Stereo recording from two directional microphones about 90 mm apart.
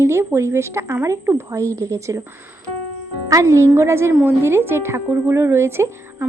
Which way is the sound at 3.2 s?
35° right (ahead or behind).